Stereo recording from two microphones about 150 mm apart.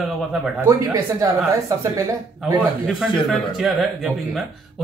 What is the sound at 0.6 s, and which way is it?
Speech, 20° right (ahead or behind).